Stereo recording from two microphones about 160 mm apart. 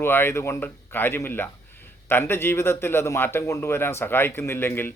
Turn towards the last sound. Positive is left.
turn(degrees=15)  # may be behind; listen again after turning